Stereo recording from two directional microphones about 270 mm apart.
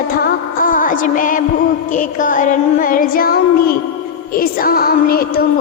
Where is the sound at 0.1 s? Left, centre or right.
Left.